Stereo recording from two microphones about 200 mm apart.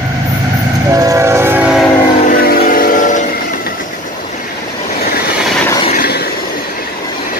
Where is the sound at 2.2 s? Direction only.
45° left (ahead or behind).